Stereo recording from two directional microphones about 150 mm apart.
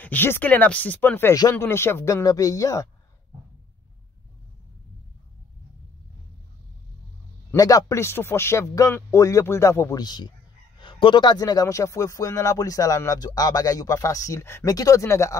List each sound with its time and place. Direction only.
0.0 s speech: 15° left (ahead or behind)
7.5 s speech: 25° left (ahead or behind)